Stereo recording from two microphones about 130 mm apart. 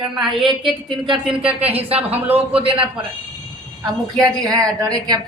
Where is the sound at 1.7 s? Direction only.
50° right (ahead or behind).